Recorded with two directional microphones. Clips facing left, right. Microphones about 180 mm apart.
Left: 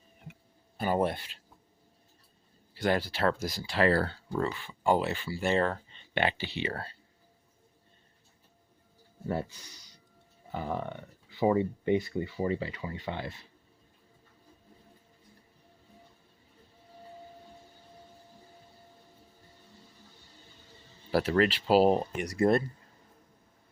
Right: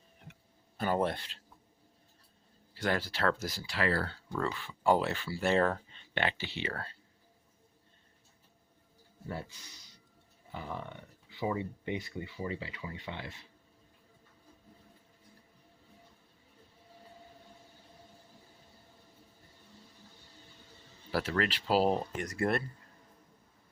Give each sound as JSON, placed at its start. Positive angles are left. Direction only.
{"t": 0.8, "sound": "speech", "side_deg": 10}
{"t": 2.7, "sound": "speech", "side_deg": 15}
{"t": 3.7, "sound": "speech", "side_deg": 35}
{"t": 4.5, "sound": "speech", "side_deg": 0}
{"t": 6.1, "sound": "speech", "side_deg": 15}
{"t": 6.7, "sound": "speech", "side_deg": 35}
{"t": 9.3, "sound": "speech", "side_deg": 45}
{"t": 21.2, "sound": "speech", "side_deg": 25}